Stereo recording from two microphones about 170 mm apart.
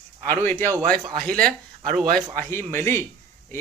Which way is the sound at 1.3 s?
5° left (ahead or behind).